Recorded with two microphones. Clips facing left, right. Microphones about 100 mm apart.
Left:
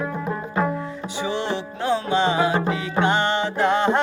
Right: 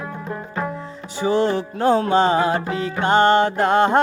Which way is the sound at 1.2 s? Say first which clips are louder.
Right 8 dB; 40° right (ahead or behind).